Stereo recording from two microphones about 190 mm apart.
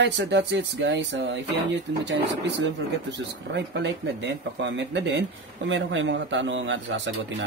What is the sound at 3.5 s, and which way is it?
Speech, 65° right (ahead or behind).